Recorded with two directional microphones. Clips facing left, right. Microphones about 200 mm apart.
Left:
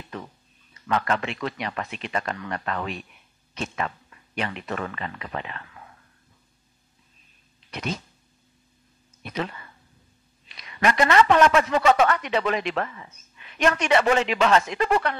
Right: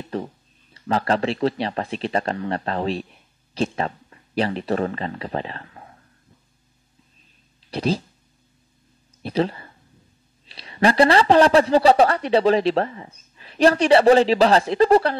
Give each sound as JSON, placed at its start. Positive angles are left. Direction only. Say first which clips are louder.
{"t": 0.0, "sound": "a sound", "louder": "right 9 dB", "side_deg": -35}
{"t": 0.7, "sound": "speech", "louder": "right 4 dB", "side_deg": -30}
{"t": 7.7, "sound": "speech", "louder": "right 9 dB", "side_deg": -30}
{"t": 9.2, "sound": "a man's voice", "louder": "right 8 dB", "side_deg": -30}